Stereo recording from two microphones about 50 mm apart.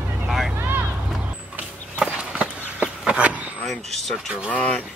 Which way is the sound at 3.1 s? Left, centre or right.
Right.